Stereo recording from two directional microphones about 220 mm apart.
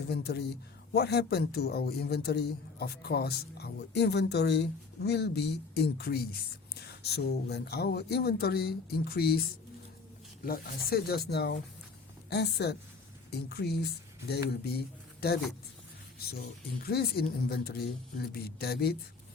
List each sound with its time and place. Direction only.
0.1 s a man's voice: 50° left (ahead or behind)
10.4 s a man's voice: 40° left (ahead or behind)
16.8 s a man's voice: 45° left (ahead or behind)